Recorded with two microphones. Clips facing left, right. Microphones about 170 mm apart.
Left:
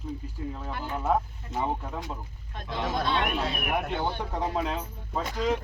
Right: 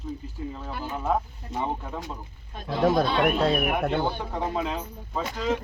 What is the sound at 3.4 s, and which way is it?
Speech, 60° right (ahead or behind).